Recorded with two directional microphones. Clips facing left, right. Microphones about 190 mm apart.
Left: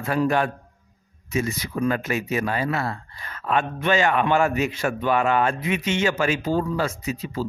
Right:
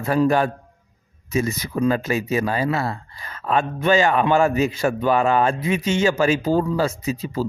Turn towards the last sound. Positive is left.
turn(degrees=-35)  # may be behind; listen again after turning